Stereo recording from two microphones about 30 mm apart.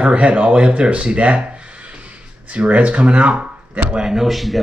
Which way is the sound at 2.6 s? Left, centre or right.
Right.